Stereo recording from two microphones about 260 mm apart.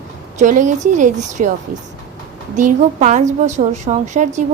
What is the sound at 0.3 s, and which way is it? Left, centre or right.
A woman's voice, right.